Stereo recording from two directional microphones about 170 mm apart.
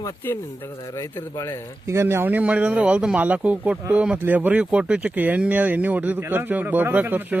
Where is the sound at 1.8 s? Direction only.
15° right (ahead or behind).